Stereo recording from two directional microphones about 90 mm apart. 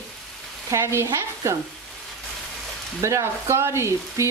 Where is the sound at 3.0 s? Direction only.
30° right (ahead or behind).